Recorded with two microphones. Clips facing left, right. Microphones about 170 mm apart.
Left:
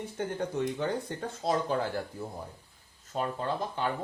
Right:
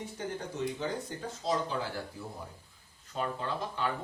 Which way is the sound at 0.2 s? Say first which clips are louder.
Left 5 dB; 55° left (ahead or behind).